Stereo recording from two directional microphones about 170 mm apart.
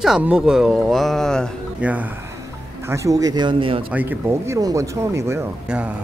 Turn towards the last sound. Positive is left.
turn(degrees=-5)  # may be behind; listen again after turning